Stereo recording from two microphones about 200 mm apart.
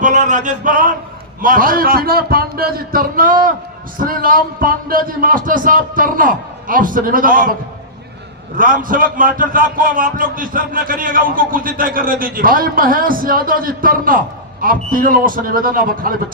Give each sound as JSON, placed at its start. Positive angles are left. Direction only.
{"t": 0.0, "sound": "a sound", "side_deg": -40}
{"t": 1.4, "sound": "speech", "side_deg": -45}
{"t": 8.5, "sound": "speech", "side_deg": -45}